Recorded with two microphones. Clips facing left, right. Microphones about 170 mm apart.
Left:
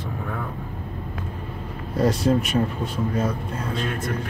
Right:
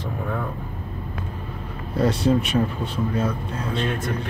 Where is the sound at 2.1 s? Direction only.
30° right (ahead or behind).